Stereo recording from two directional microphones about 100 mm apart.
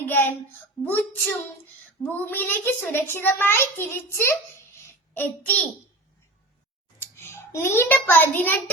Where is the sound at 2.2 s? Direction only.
20° left (ahead or behind).